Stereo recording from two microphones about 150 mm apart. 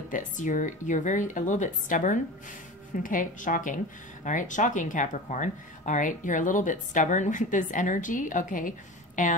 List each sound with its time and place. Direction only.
0.1 s speech: 55° left (ahead or behind)